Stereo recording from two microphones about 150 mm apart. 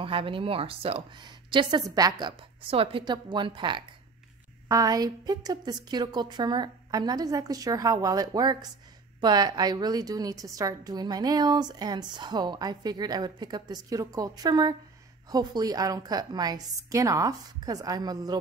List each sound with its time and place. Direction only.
0.0 s a woman's voice: 35° right (ahead or behind)